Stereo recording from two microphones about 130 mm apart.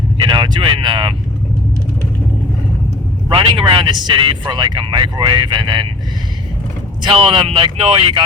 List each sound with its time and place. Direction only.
0.3 s speech: 35° right (ahead or behind)
3.2 s speech: 40° right (ahead or behind)
7.0 s speech: 45° right (ahead or behind)